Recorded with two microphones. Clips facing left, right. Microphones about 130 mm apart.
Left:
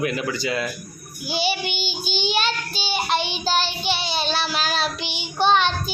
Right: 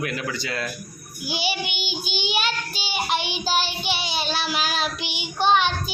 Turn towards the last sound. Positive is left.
turn(degrees=-10)  # may be behind; listen again after turning